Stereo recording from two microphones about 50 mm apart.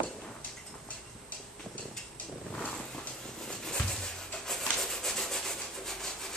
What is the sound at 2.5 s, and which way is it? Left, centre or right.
Vehicle, centre.